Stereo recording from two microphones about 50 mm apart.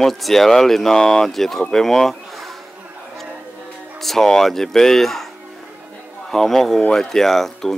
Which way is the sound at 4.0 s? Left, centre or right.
Centre.